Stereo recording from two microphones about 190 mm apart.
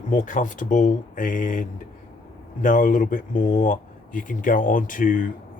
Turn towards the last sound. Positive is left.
turn(degrees=45)  # may be behind; listen again after turning